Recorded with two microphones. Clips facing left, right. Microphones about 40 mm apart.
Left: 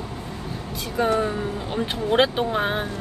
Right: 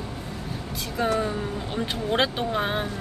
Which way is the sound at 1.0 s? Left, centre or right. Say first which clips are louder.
Left 2 dB; centre.